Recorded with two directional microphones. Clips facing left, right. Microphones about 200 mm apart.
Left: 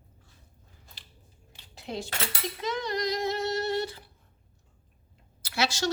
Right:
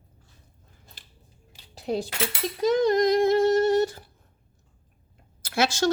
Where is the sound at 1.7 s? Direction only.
40° right (ahead or behind).